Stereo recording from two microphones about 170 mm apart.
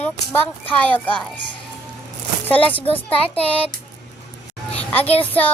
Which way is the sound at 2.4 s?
10° left (ahead or behind).